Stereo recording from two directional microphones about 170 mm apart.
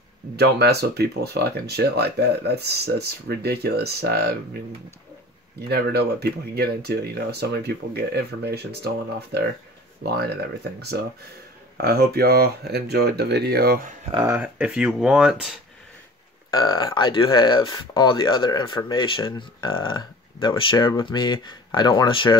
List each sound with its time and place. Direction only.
0.4 s speech: 70° right (ahead or behind)
5.6 s speech: 70° right (ahead or behind)
14.3 s speech: 10° right (ahead or behind)
16.4 s speech: 25° left (ahead or behind)